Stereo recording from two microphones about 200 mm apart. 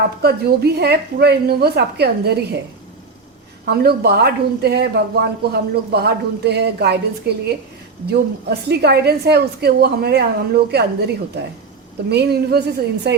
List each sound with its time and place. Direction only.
0.2 s speech: 55° right (ahead or behind)
3.7 s speech: 55° right (ahead or behind)